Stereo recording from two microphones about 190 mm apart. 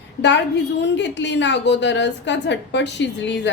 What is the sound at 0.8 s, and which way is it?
A woman's voice, 70° left (ahead or behind).